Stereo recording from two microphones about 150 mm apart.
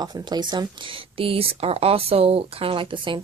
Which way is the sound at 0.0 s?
30° right (ahead or behind).